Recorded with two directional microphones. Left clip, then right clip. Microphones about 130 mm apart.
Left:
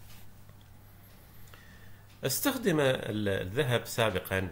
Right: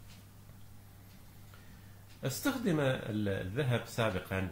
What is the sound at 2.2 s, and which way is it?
Speech, 15° left (ahead or behind).